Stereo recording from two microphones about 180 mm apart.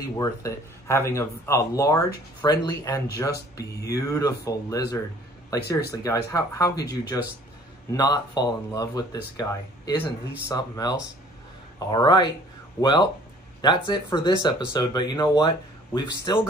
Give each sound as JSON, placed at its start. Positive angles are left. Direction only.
{"t": 0.2, "sound": "speech", "side_deg": 15}